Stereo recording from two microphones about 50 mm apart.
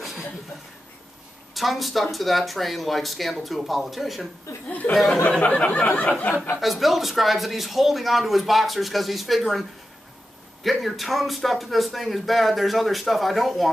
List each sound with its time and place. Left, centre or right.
1.5 s speech: centre
4.6 s speech: left
4.9 s speech: centre
5.4 s a sound: left
6.6 s speech: centre